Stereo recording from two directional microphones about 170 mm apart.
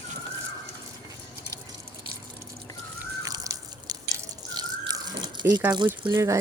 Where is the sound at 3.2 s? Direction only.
20° right (ahead or behind).